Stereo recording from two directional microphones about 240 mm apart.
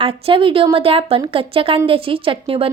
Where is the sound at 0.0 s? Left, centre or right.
Right.